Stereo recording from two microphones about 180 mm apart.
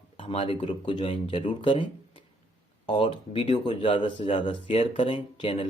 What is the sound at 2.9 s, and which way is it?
Speech, 30° left (ahead or behind).